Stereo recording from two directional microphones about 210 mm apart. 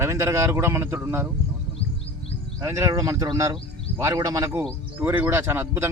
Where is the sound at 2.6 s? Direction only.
15° right (ahead or behind).